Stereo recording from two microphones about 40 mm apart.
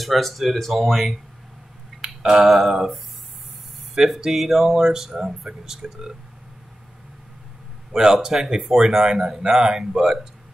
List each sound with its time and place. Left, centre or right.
0.0 s speech: centre
2.0 s tick: centre
2.4 s speech: centre
4.2 s speech: centre
7.9 s speech: centre